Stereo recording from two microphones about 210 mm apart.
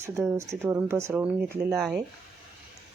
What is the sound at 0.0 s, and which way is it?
Speech, 15° right (ahead or behind).